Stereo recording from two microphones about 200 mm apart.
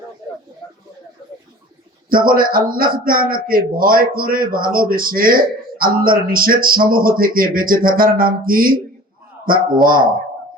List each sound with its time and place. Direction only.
2.0 s a man's voice: 45° right (ahead or behind)